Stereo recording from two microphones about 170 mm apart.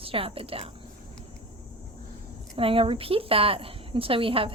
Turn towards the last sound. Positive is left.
turn(degrees=-30)  # may be behind; listen again after turning